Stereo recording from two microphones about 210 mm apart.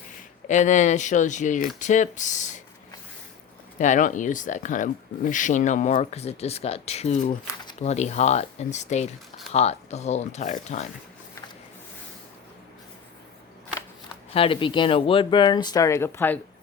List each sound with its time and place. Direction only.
0.4 s speech: 35° left (ahead or behind)
3.8 s speech: 35° left (ahead or behind)
14.3 s speech: 25° left (ahead or behind); by 16.4 s 10° left (ahead or behind)